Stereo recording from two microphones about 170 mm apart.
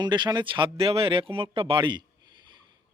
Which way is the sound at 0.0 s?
25° right (ahead or behind).